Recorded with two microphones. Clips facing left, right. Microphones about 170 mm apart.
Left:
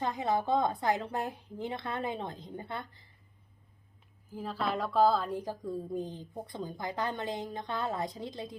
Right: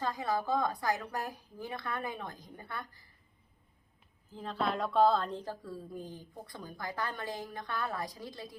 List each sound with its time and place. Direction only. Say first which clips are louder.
0.0 s speech: left 3 dB; 20° left (ahead or behind)
4.3 s speech: even; 5° left (ahead or behind); by 8.5 s 20° left (ahead or behind)